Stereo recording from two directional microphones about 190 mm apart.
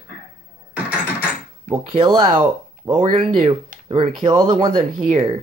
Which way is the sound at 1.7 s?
45° right (ahead or behind).